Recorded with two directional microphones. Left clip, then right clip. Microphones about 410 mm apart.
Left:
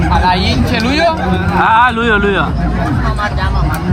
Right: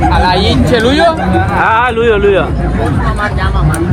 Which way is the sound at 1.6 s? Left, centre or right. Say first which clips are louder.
Left 1 dB; centre.